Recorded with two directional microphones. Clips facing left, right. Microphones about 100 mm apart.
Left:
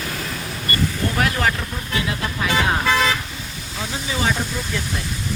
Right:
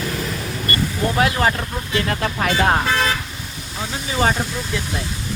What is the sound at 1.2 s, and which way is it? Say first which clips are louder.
Speech: right 3 dB; 25° right (ahead or behind).